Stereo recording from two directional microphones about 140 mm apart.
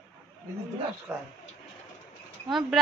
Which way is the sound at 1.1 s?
15° right (ahead or behind).